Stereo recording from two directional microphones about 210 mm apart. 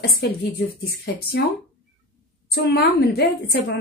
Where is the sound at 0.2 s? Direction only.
50° left (ahead or behind).